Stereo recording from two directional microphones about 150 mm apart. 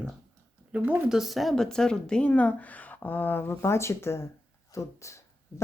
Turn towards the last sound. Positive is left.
turn(degrees=20)  # may be behind; listen again after turning